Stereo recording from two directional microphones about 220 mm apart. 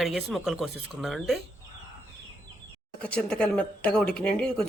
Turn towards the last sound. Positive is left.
turn(degrees=5)  # may be behind; listen again after turning